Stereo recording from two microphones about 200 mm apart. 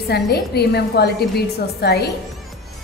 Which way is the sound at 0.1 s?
50° left (ahead or behind).